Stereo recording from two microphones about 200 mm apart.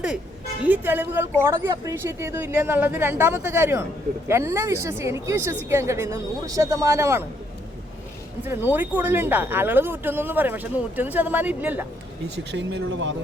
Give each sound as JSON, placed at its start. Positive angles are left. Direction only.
{"t": 0.6, "sound": "speech", "side_deg": -10}
{"t": 8.4, "sound": "speech", "side_deg": -10}
{"t": 12.5, "sound": "speech", "side_deg": -60}